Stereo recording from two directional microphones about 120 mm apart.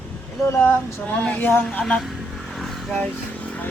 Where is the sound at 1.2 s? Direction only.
15° left (ahead or behind).